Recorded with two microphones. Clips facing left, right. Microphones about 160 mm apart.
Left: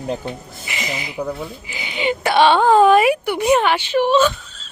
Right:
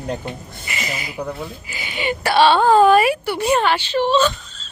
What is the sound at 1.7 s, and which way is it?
A woman's voice, 20° left (ahead or behind).